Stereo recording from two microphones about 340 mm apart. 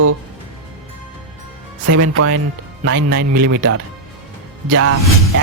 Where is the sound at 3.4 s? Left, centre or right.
Right.